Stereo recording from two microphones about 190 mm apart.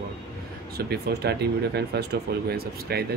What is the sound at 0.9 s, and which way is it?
Speech, 60° right (ahead or behind).